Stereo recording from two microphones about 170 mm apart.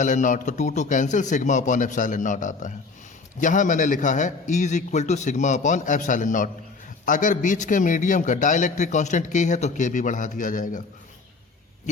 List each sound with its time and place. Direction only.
0.0 s a man's voice: 45° left (ahead or behind)